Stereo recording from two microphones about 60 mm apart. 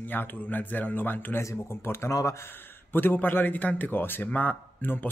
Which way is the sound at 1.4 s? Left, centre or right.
Left.